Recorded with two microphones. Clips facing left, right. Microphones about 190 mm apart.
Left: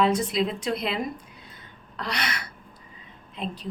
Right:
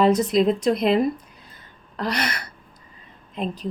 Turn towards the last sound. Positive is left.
turn(degrees=-45)  # may be behind; listen again after turning